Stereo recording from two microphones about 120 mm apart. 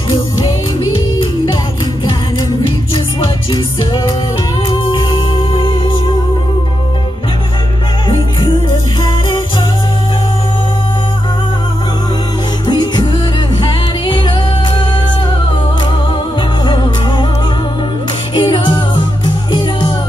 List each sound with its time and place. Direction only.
4.6 s music: 45° left (ahead or behind)
12.6 s music: 35° left (ahead or behind)
16.6 s music: 40° left (ahead or behind)
18.3 s music: 40° left (ahead or behind)